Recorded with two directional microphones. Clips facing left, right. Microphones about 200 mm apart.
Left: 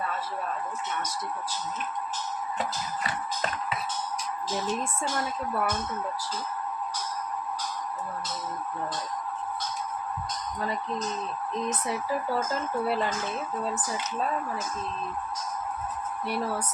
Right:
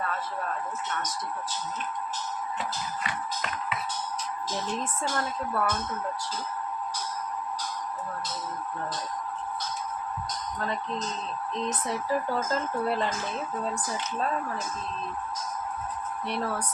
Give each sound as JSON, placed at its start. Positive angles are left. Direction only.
{"t": 3.0, "sound": "music", "side_deg": 35}
{"t": 4.6, "sound": "a woman's voice", "side_deg": 10}
{"t": 12.8, "sound": "speech", "side_deg": 5}
{"t": 16.2, "sound": "a woman's voice", "side_deg": 5}